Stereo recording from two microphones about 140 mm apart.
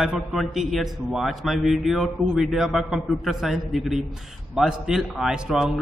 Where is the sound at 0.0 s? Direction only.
5° right (ahead or behind).